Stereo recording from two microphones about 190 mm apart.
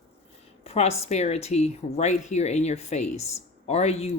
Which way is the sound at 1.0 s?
35° left (ahead or behind).